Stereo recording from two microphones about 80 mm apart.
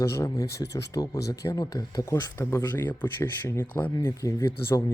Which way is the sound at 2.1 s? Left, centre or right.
Left.